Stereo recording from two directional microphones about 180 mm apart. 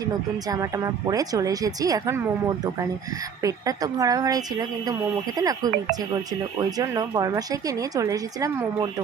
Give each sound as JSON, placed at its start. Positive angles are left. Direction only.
{"t": 0.4, "sound": "a woman's voice", "side_deg": -20}
{"t": 3.4, "sound": "a woman's voice", "side_deg": -20}